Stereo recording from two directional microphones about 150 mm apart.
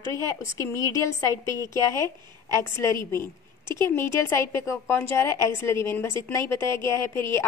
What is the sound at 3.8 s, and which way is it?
A woman's voice, 15° left (ahead or behind).